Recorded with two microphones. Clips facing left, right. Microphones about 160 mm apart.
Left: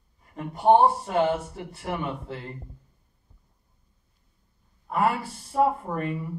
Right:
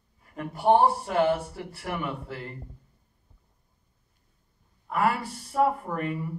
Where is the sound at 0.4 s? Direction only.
20° left (ahead or behind).